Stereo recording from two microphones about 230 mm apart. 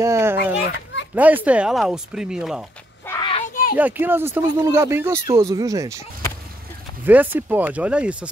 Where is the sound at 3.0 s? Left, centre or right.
Centre.